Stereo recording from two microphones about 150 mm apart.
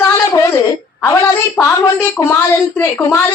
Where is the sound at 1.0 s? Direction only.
20° left (ahead or behind).